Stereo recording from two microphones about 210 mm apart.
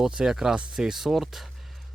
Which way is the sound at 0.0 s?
5° right (ahead or behind).